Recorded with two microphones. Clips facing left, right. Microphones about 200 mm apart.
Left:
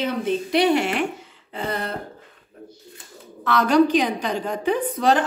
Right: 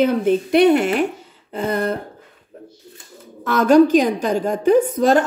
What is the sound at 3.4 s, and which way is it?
A woman's voice, 45° right (ahead or behind).